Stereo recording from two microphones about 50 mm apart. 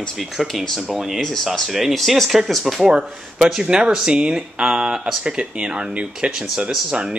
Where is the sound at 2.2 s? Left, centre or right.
Centre.